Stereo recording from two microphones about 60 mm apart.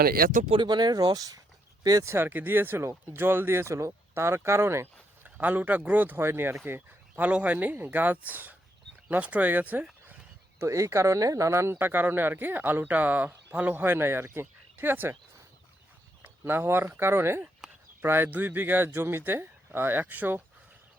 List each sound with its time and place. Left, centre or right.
0.9 s speech: right
2.0 s speech: right
5.2 s speech: right
7.3 s speech: right
10.6 s speech: right
16.4 s speech: right